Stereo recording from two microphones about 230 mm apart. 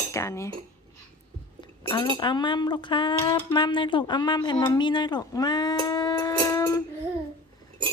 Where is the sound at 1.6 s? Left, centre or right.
Centre.